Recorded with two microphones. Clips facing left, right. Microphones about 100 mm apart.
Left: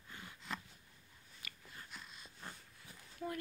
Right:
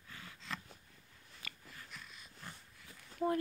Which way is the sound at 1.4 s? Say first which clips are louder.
Right 1 dB; 30° left (ahead or behind).